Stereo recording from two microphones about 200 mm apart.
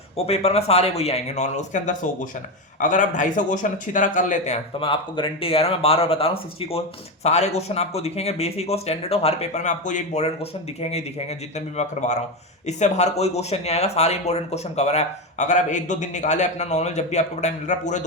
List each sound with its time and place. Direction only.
0.3 s speech: 30° left (ahead or behind)